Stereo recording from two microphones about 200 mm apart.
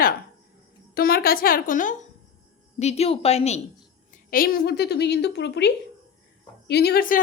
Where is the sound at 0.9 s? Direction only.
50° left (ahead or behind); by 3.6 s 30° left (ahead or behind).